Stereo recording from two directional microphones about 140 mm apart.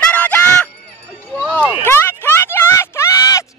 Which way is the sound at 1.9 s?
15° left (ahead or behind).